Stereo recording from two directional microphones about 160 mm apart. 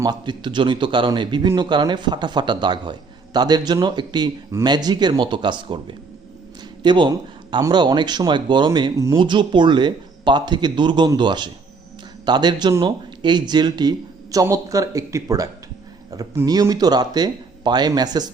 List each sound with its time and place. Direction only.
0.0 s speech: 30° right (ahead or behind)